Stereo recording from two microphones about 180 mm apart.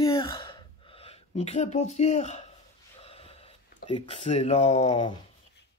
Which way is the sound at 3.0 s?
35° left (ahead or behind).